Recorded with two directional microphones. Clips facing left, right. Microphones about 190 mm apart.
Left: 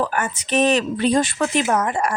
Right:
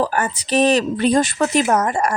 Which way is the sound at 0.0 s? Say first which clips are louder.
Right 3 dB; 35° right (ahead or behind).